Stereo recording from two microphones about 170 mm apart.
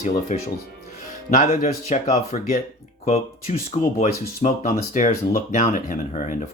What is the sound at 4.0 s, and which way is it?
Speech, 45° left (ahead or behind).